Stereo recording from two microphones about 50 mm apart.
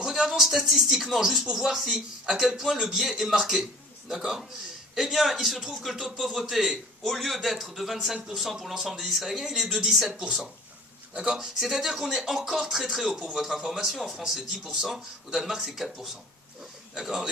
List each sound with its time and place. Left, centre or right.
0.0 s speech: centre
4.9 s a man's voice: centre
11.6 s a man's voice: centre